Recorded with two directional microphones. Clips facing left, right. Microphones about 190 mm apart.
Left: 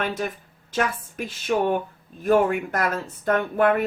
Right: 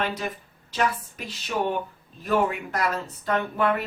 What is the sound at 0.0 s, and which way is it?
Speech, 50° left (ahead or behind).